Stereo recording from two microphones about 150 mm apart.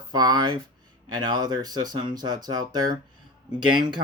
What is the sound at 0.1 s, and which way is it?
Speech, 25° right (ahead or behind).